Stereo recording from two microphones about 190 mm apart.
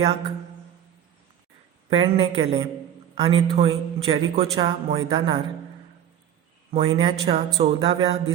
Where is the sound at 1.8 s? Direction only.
25° right (ahead or behind).